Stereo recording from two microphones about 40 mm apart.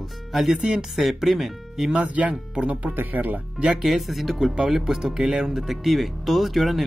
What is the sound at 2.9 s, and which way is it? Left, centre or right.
Speech, right.